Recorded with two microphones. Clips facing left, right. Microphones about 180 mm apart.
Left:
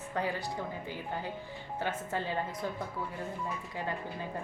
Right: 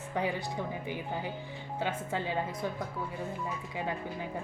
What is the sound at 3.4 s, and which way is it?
Speech, 15° right (ahead or behind).